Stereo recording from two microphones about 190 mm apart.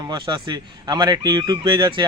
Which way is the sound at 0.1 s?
25° right (ahead or behind).